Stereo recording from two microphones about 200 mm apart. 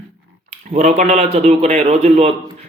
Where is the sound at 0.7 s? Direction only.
35° right (ahead or behind).